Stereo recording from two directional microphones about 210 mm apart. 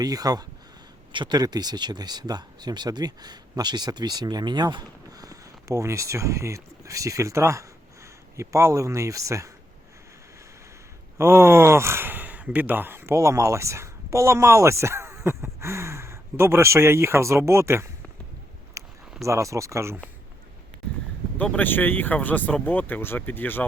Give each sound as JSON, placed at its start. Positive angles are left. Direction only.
{"t": 0.0, "sound": "speech", "side_deg": -15}
{"t": 11.2, "sound": "speech", "side_deg": -10}
{"t": 18.8, "sound": "a sound", "side_deg": -15}
{"t": 19.2, "sound": "speech", "side_deg": -15}
{"t": 21.3, "sound": "speech", "side_deg": 5}